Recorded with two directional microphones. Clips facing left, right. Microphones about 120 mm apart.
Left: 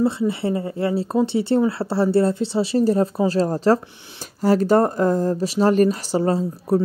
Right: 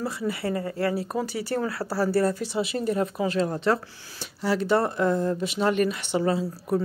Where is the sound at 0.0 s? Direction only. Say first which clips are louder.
Left 8 dB; 25° left (ahead or behind).